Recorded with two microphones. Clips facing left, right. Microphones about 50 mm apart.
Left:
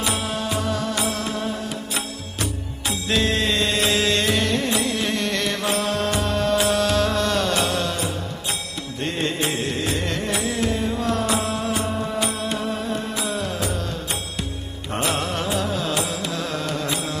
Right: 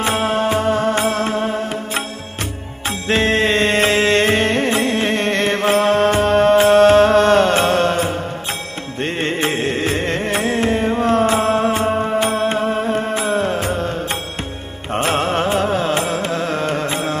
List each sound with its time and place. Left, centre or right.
0.0 s music: right